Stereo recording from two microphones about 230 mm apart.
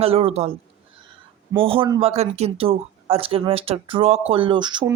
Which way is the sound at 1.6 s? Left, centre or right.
Right.